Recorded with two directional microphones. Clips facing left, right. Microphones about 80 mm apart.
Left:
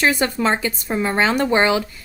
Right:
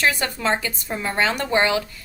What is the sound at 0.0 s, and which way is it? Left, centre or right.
Speech, left.